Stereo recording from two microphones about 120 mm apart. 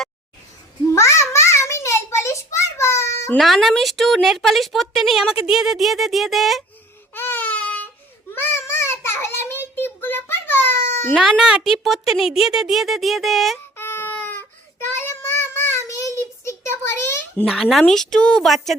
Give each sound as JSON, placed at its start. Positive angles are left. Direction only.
{"t": 0.9, "sound": "a sound", "side_deg": 25}
{"t": 3.3, "sound": "speech", "side_deg": 0}
{"t": 7.1, "sound": "baby cry", "side_deg": 15}
{"t": 8.3, "sound": "child singing", "side_deg": 20}
{"t": 11.1, "sound": "speech", "side_deg": -5}
{"t": 13.7, "sound": "baby cry", "side_deg": 20}
{"t": 15.0, "sound": "child singing", "side_deg": 20}
{"t": 17.4, "sound": "speech", "side_deg": 0}